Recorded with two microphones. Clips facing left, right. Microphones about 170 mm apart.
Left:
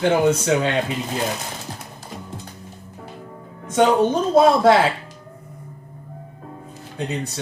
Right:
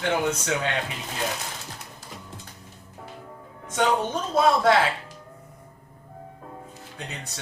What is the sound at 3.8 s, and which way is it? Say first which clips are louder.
Speech: left 8 dB; 30° left (ahead or behind).